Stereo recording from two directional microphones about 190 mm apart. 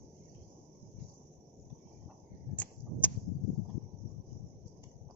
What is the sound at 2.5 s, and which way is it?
Whip, 10° left (ahead or behind).